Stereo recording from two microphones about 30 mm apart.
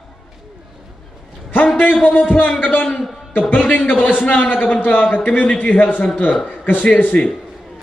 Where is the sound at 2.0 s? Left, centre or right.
Left.